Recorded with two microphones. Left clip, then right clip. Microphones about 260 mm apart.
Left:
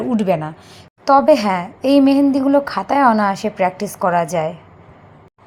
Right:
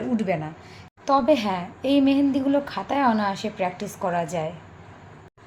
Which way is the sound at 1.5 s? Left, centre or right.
Centre.